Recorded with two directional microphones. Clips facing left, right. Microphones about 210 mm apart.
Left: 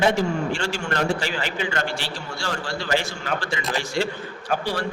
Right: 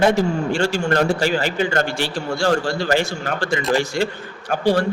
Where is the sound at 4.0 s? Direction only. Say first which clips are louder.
Right 3 dB; centre (ahead or behind).